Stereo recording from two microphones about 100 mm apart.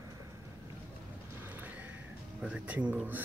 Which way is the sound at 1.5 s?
15° right (ahead or behind).